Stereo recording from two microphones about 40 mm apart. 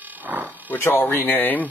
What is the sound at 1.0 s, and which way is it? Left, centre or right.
Speech, left.